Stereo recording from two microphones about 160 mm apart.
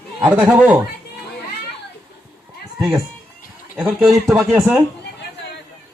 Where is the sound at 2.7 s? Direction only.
25° right (ahead or behind).